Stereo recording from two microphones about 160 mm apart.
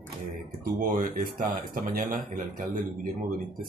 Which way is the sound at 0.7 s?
60° right (ahead or behind).